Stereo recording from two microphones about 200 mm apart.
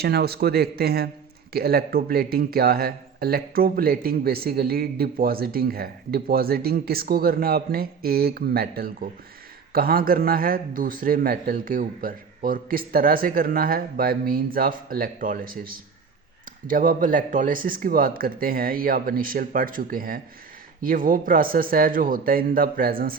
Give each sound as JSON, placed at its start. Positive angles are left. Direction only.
{"t": 0.0, "sound": "speech", "side_deg": -50}